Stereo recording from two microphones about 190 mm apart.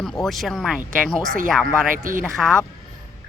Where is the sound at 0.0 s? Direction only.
Centre (ahead or behind).